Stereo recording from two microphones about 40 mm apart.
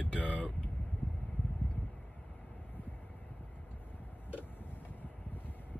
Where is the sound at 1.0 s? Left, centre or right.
Left.